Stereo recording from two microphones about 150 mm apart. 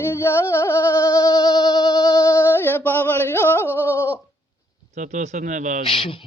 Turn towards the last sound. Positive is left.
turn(degrees=35)  # may be behind; listen again after turning